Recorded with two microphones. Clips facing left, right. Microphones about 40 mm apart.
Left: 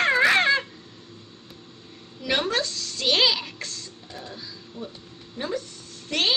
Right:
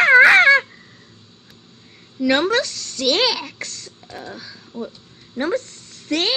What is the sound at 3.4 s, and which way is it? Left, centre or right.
Speech, right.